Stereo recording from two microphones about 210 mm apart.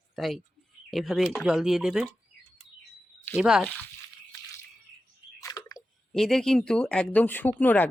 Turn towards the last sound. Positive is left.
turn(degrees=10)  # may be behind; listen again after turning